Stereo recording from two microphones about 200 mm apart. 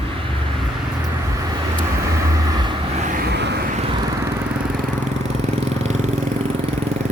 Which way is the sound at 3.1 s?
60° right (ahead or behind).